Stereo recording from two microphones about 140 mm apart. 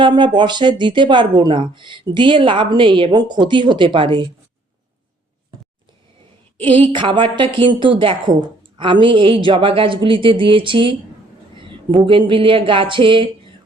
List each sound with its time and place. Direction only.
0.0 s a woman's voice: 35° right (ahead or behind)
6.7 s a woman's voice: 35° right (ahead or behind)